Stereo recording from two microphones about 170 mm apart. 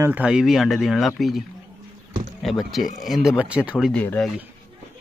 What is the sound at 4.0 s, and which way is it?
Speech, 5° left (ahead or behind).